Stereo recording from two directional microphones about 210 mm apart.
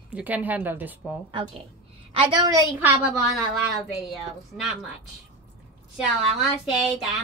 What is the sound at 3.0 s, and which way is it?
A woman's voice, 5° right (ahead or behind).